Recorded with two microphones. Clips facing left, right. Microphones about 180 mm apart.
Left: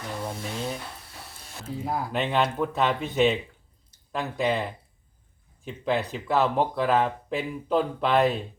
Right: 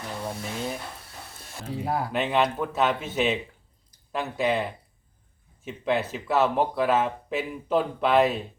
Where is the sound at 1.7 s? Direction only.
65° right (ahead or behind).